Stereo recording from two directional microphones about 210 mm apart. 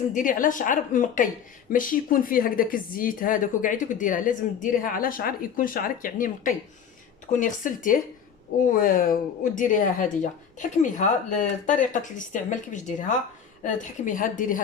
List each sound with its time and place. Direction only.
0.1 s speech: 40° left (ahead or behind)